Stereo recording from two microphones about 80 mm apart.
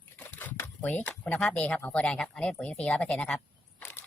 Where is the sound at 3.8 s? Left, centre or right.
Centre.